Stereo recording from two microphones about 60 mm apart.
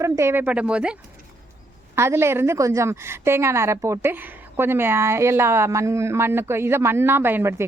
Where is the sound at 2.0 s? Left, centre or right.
Right.